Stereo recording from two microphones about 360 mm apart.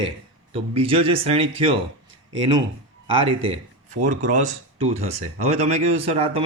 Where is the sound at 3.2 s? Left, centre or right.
Centre.